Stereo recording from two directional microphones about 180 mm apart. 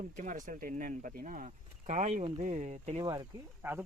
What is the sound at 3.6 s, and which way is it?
Speech, 15° right (ahead or behind).